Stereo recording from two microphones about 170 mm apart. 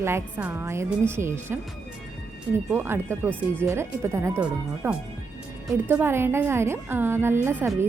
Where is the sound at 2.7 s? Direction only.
15° right (ahead or behind).